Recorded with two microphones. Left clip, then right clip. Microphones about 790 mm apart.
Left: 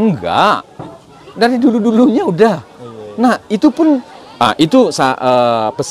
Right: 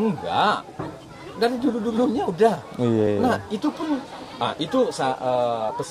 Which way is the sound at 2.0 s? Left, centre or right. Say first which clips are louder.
Left 8 dB; left.